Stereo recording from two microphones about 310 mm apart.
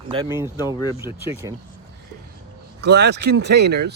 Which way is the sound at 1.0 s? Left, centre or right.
Centre.